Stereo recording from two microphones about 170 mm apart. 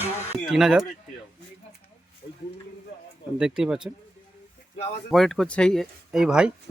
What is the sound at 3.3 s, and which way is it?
Speech, 5° right (ahead or behind).